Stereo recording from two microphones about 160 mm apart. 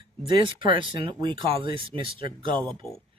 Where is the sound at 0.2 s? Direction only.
35° right (ahead or behind).